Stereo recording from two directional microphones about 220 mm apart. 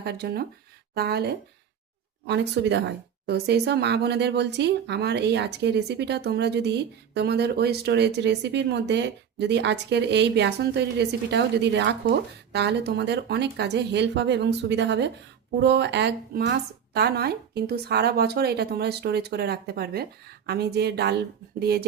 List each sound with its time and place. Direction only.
0.0 s speech: 45° right (ahead or behind)